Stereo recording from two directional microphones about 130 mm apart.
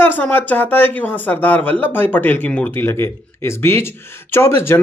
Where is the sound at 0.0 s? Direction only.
15° left (ahead or behind).